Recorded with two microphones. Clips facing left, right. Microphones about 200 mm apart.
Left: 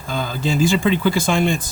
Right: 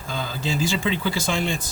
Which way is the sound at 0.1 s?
50° left (ahead or behind).